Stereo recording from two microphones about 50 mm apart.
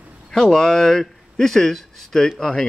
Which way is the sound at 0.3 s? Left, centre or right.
Centre.